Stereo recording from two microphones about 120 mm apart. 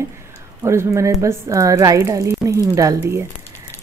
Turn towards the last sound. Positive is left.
turn(degrees=-20)  # may be behind; listen again after turning